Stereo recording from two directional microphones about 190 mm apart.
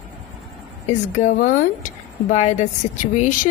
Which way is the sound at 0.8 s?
40° left (ahead or behind).